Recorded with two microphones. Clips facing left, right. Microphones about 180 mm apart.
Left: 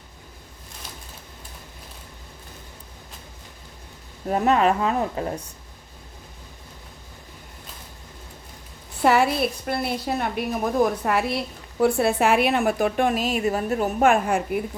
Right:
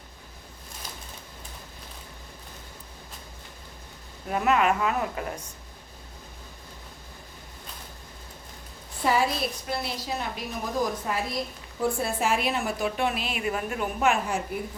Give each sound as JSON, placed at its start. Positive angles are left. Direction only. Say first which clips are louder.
{"t": 4.3, "sound": "a woman's voice", "louder": "left 4 dB", "side_deg": 35}
{"t": 9.0, "sound": "a woman's voice", "louder": "left 6 dB", "side_deg": 65}